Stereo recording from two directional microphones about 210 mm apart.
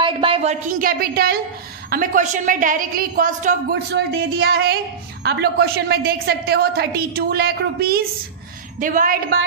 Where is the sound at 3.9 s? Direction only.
50° right (ahead or behind).